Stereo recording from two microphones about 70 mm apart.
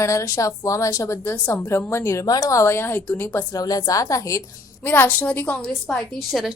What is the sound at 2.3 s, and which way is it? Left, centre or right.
Speech, left.